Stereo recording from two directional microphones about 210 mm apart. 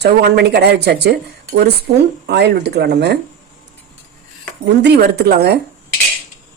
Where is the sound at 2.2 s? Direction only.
50° right (ahead or behind).